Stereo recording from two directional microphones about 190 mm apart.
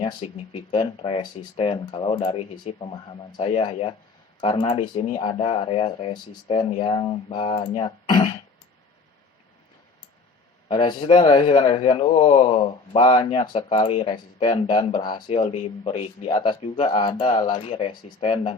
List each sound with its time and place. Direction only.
0.0 s speech: 25° left (ahead or behind)
10.7 s speech: 25° left (ahead or behind)